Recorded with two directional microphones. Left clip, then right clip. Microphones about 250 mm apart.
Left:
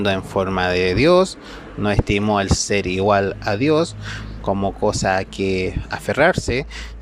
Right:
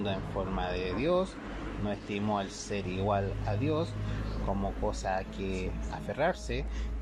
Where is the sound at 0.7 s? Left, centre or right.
Left.